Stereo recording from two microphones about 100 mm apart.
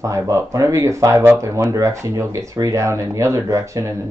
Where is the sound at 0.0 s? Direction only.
30° right (ahead or behind).